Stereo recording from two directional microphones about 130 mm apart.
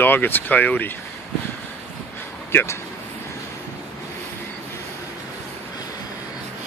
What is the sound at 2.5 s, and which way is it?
Speech, 15° left (ahead or behind).